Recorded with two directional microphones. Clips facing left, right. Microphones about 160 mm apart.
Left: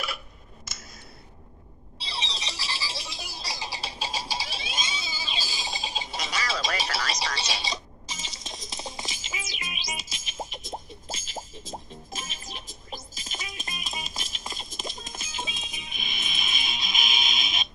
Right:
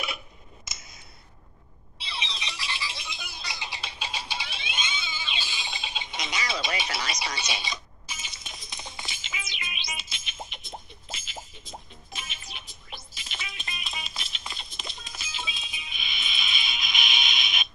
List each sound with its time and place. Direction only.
2.0 s music: 35° left (ahead or behind)
7.3 s a sound: 35° left (ahead or behind)
12.1 s music: 40° left (ahead or behind)